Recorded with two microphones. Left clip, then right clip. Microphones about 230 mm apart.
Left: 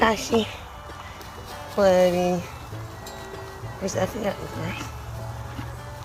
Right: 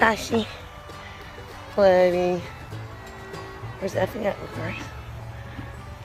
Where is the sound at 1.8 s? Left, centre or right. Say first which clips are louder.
Right 1 dB; right.